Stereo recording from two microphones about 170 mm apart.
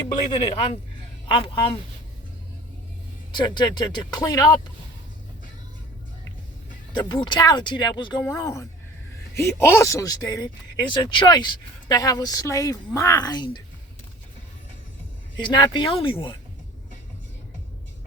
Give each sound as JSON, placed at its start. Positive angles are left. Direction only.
{"t": 0.1, "sound": "speech", "side_deg": 30}
{"t": 3.3, "sound": "speech", "side_deg": 25}
{"t": 6.9, "sound": "speech", "side_deg": 25}
{"t": 15.4, "sound": "speech", "side_deg": 30}